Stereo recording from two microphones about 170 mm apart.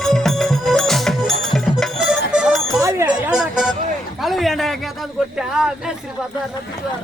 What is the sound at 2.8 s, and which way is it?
Chatter, 15° right (ahead or behind).